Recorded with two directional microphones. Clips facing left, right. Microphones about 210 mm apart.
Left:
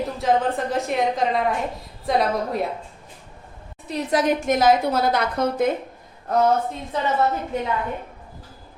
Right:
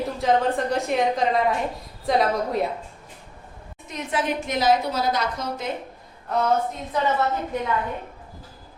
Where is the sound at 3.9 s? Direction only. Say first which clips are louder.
Left 5 dB; 35° left (ahead or behind); by 5.6 s 55° left (ahead or behind).